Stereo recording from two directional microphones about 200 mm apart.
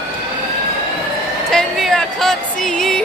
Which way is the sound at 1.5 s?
Centre (ahead or behind).